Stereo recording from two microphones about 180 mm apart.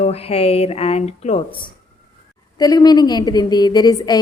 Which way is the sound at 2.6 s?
20° left (ahead or behind).